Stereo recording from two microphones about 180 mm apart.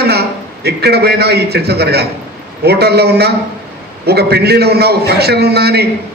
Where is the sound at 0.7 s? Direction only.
65° right (ahead or behind).